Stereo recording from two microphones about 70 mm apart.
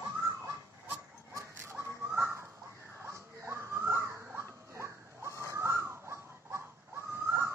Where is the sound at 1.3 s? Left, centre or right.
Right.